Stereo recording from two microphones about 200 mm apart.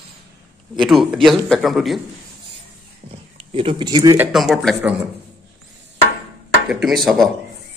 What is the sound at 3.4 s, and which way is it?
Speech, 25° right (ahead or behind).